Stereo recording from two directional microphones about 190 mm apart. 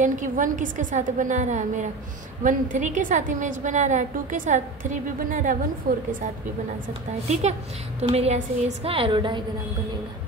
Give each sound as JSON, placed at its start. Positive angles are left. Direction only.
{"t": 0.0, "sound": "a woman's voice", "side_deg": -40}
{"t": 8.0, "sound": "a woman's voice", "side_deg": -30}